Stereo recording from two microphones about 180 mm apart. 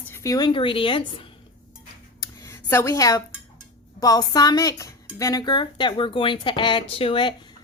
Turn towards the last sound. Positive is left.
turn(degrees=30)  # may be behind; listen again after turning